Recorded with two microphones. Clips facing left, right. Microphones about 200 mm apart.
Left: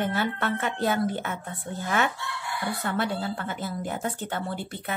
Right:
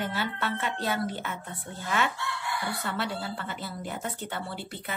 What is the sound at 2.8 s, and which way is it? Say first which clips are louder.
A woman's voice: left 4 dB; 50° left (ahead or behind).